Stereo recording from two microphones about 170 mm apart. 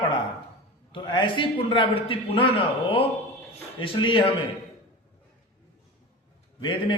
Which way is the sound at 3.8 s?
30° left (ahead or behind).